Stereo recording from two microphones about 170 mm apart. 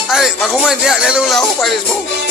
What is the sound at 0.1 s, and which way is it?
Speech, 5° right (ahead or behind).